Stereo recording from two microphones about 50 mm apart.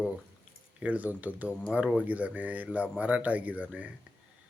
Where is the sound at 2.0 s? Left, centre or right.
Right.